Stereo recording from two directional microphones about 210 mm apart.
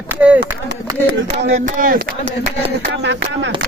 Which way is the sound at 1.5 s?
40° right (ahead or behind).